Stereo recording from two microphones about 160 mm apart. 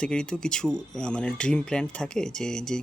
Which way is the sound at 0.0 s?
5° left (ahead or behind).